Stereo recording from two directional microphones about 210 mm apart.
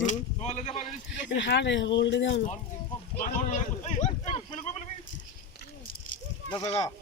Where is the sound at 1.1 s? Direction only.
60° left (ahead or behind).